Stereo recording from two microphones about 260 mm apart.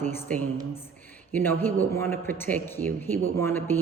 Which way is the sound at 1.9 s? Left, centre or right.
Centre.